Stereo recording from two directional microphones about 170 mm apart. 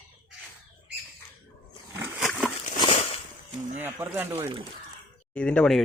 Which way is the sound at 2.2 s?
Centre (ahead or behind).